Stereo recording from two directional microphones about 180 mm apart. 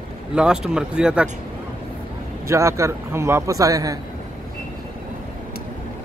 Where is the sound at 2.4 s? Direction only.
15° right (ahead or behind).